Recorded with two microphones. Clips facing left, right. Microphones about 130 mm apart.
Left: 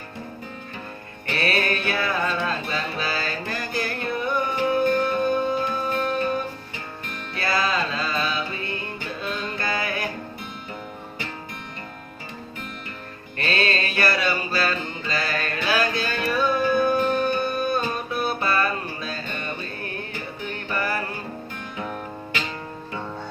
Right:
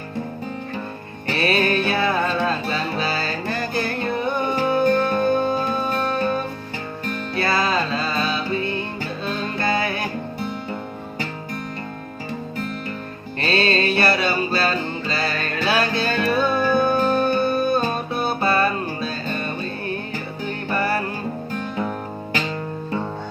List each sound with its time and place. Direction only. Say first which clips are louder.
1.4 s music: right 5 dB; 25° right (ahead or behind)
13.4 s music: right 5 dB; 30° right (ahead or behind)
20.7 s music: right 5 dB; 35° right (ahead or behind)